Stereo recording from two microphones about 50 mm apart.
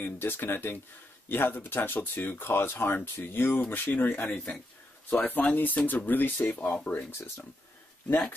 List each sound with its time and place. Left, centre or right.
0.0 s speech: left
7.1 s speech: left